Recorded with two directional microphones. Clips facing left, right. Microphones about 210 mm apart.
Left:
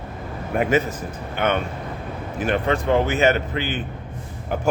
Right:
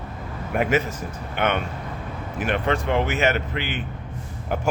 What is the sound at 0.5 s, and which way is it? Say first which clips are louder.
Speech: left 1 dB; 35° left (ahead or behind).